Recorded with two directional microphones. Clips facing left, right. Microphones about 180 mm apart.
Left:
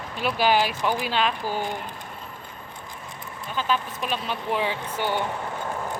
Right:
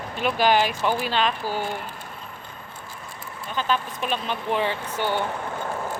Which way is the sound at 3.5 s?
5° left (ahead or behind).